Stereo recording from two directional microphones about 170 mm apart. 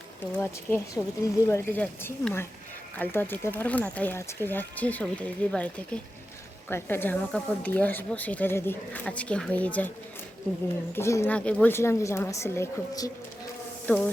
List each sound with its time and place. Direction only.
0.2 s speech: 10° left (ahead or behind)
10.9 s speech: 15° left (ahead or behind)